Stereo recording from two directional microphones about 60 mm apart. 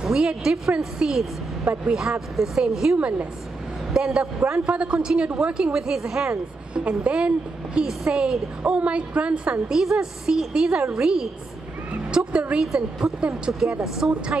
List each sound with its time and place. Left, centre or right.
0.0 s a woman's voice: centre
3.0 s a woman's voice: right